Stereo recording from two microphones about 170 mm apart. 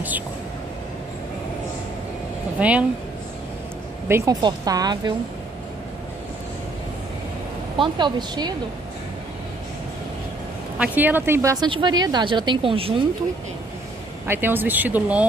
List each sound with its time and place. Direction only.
2.6 s speech: 10° right (ahead or behind)
4.1 s a woman's voice: 25° right (ahead or behind)
7.7 s a woman's voice: 25° right (ahead or behind)
10.8 s speech: 10° right (ahead or behind)
11.6 s a woman's voice: 25° right (ahead or behind)
14.2 s speech: 10° right (ahead or behind)